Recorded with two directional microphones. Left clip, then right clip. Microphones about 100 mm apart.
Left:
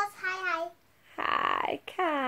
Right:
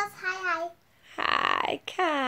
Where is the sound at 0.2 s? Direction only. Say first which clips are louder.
Right 2 dB; 5° right (ahead or behind).